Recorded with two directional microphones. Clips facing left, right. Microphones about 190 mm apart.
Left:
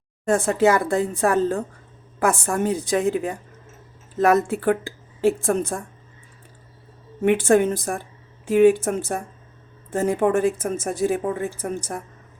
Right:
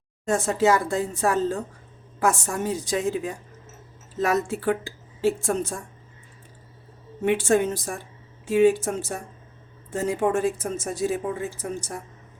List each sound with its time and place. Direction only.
0.3 s a woman's voice: 60° left (ahead or behind)
7.3 s a woman's voice: 55° left (ahead or behind)